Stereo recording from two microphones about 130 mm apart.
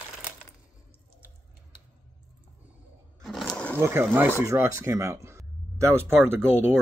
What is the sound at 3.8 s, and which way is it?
Speech, 20° right (ahead or behind).